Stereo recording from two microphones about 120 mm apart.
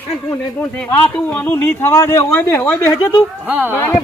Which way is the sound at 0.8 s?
10° left (ahead or behind).